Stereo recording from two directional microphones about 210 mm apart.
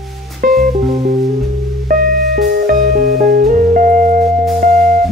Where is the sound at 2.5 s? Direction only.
45° right (ahead or behind).